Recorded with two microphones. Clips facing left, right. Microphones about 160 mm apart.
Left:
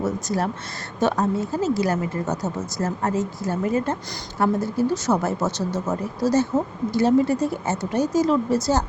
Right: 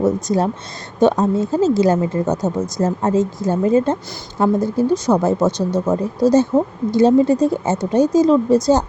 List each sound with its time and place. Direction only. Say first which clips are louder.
0.0 s a woman's voice: right 7 dB; 20° right (ahead or behind)